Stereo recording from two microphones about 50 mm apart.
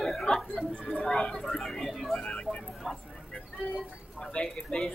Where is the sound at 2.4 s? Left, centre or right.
Centre.